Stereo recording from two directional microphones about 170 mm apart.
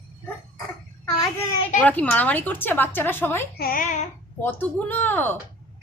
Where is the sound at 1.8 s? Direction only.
10° left (ahead or behind).